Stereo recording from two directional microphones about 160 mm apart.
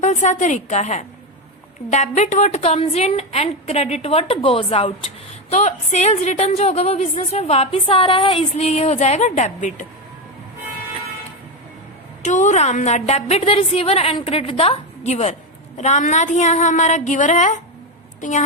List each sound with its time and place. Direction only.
0.0 s a woman's voice: 50° left (ahead or behind)
12.2 s a woman's voice: 50° left (ahead or behind)